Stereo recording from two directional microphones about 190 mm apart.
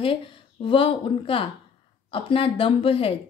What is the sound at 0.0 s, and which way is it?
A woman's voice, 30° left (ahead or behind).